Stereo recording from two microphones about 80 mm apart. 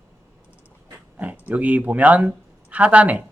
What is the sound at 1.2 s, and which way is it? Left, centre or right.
Speech, centre.